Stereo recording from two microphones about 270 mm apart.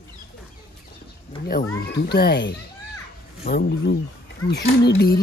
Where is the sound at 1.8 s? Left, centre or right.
Left.